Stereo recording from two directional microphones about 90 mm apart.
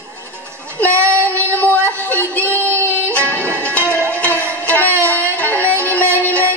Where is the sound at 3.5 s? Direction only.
25° right (ahead or behind).